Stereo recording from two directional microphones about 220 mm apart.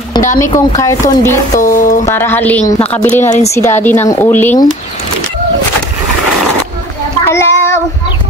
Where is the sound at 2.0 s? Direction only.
10° left (ahead or behind).